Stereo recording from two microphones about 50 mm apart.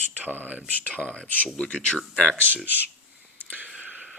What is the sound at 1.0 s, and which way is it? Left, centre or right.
Speech, centre.